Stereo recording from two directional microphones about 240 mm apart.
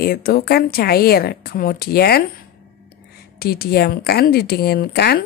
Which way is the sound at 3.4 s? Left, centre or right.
Left.